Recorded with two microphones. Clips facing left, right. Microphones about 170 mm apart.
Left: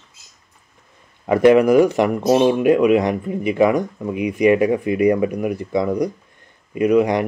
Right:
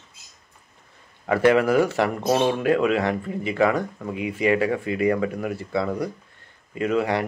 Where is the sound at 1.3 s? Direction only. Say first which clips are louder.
Left 6 dB; 15° left (ahead or behind).